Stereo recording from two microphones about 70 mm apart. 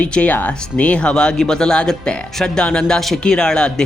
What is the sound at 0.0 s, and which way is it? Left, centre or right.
A man's voice, centre.